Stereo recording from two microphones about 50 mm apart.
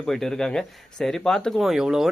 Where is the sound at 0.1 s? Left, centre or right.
Centre.